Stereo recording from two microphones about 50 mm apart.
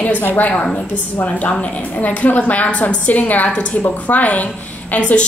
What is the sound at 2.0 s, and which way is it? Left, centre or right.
A woman's voice, left.